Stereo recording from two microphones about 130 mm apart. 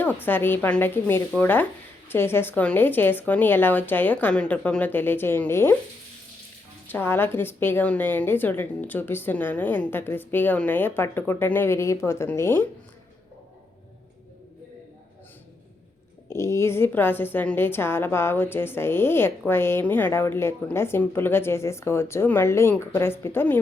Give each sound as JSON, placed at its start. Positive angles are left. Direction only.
{"t": 0.2, "sound": "a woman's voice", "side_deg": 15}
{"t": 6.8, "sound": "a woman's voice", "side_deg": 15}
{"t": 16.3, "sound": "a woman's voice", "side_deg": 20}